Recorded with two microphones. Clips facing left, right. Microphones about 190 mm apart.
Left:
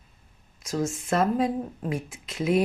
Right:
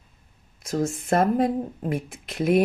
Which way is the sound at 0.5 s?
55° right (ahead or behind).